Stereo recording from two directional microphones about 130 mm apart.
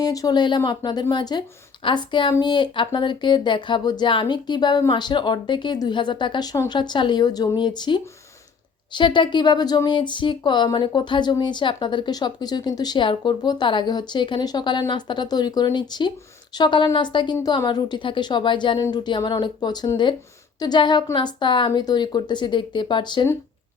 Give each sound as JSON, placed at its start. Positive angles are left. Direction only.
{"t": 0.0, "sound": "speech", "side_deg": 30}